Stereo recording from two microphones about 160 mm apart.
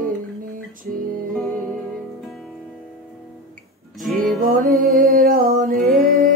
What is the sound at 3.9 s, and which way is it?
Music, centre (ahead or behind).